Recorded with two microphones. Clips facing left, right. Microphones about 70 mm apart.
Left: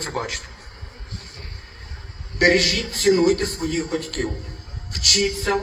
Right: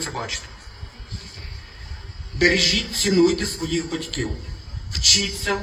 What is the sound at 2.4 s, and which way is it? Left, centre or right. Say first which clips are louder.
A man's voice: left 2 dB; left.